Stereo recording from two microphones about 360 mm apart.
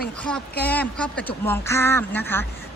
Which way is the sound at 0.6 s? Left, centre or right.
Centre.